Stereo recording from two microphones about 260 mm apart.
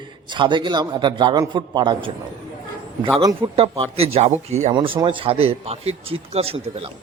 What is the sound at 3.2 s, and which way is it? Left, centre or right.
A man's voice, centre.